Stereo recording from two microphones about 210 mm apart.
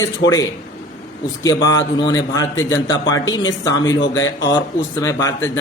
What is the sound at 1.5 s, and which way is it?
A man's voice, 15° left (ahead or behind).